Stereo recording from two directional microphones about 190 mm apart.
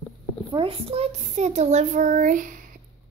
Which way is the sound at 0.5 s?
30° right (ahead or behind).